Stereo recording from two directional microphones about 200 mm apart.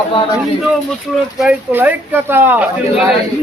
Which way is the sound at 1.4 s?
5° right (ahead or behind).